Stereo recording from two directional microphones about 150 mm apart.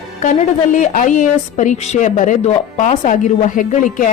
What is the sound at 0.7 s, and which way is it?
A woman's voice, 60° left (ahead or behind).